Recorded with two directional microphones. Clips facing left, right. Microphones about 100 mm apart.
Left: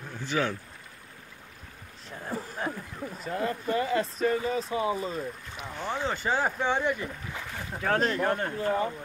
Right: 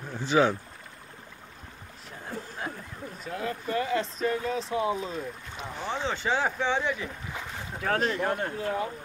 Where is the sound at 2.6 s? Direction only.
5° right (ahead or behind).